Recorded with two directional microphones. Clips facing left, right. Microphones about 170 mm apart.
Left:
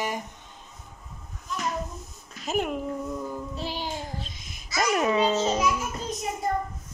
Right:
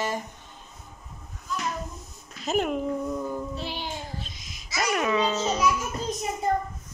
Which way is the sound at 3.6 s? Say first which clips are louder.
Left 1 dB; 40° left (ahead or behind).